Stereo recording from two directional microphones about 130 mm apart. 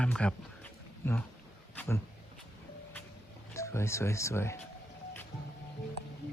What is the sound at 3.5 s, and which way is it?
Speech, 20° left (ahead or behind).